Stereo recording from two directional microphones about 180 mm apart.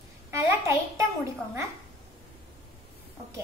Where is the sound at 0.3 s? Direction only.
15° right (ahead or behind).